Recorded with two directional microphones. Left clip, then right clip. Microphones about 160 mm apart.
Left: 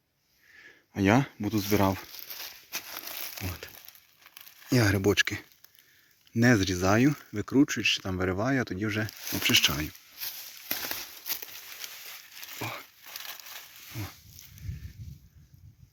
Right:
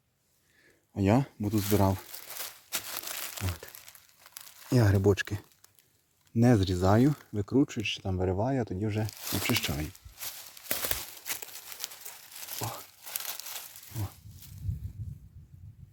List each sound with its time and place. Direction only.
0.5 s speech: centre (ahead or behind)
2.6 s crushing: 5° right (ahead or behind)
4.7 s speech: centre (ahead or behind)
12.5 s a sound: centre (ahead or behind)
13.1 s crumpling: 30° right (ahead or behind)